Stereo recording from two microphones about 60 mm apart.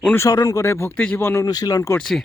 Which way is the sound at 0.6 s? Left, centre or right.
Left.